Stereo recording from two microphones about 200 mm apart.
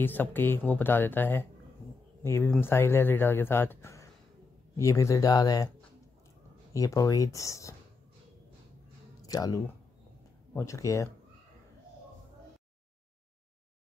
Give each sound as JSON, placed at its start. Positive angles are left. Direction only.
{"t": 0.0, "sound": "speech", "side_deg": 10}
{"t": 6.7, "sound": "speech", "side_deg": 15}
{"t": 9.2, "sound": "speech", "side_deg": 20}